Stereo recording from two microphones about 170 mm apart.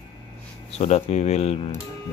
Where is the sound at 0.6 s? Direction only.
40° left (ahead or behind).